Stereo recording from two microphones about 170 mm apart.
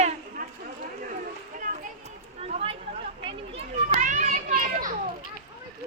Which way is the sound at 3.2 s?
35° right (ahead or behind).